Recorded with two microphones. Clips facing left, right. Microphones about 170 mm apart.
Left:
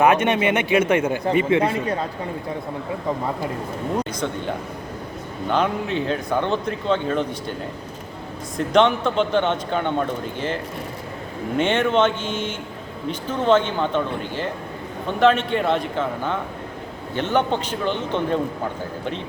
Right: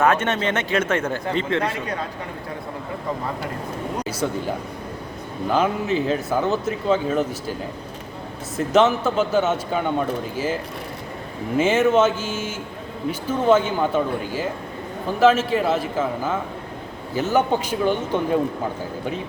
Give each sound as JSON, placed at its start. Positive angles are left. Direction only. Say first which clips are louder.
{"t": 0.0, "sound": "a man's voice", "louder": "left 3 dB", "side_deg": 15}
{"t": 5.5, "sound": "speech", "louder": "right 1 dB", "side_deg": -5}
{"t": 8.5, "sound": "speech", "louder": "even", "side_deg": -5}